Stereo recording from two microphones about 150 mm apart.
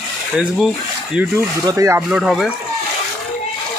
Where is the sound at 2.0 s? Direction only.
5° right (ahead or behind).